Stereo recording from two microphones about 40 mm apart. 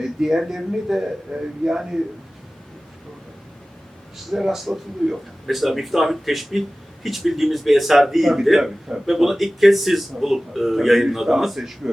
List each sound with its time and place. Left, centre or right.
0.0 s speech: centre
4.3 s a man's voice: centre